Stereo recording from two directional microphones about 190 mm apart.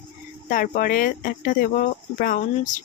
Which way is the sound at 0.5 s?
50° left (ahead or behind).